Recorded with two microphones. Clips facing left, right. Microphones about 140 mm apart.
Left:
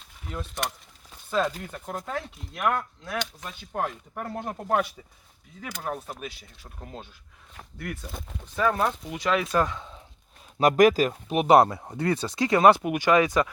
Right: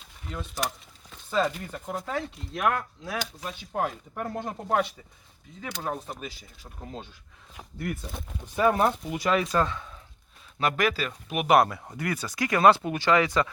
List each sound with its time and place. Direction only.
0.3 s speech: centre (ahead or behind)
7.5 s speech: centre (ahead or behind)
8.5 s speech: 15° right (ahead or behind); by 9.6 s centre (ahead or behind)
9.6 s speech: 20° left (ahead or behind)
10.6 s speech: 40° left (ahead or behind)
11.1 s speech: 30° left (ahead or behind)